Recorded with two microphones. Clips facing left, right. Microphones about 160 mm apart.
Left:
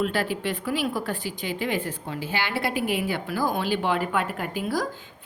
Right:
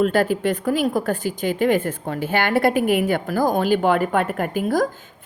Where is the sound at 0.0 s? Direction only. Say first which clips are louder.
Right 7 dB; 45° right (ahead or behind).